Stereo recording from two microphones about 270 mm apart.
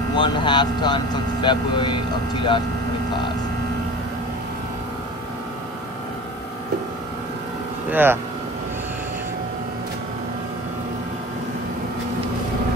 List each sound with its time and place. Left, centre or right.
0.1 s speech: centre
7.9 s speech: centre